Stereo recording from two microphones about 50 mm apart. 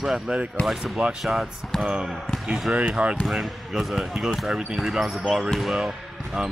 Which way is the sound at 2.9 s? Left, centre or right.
Right.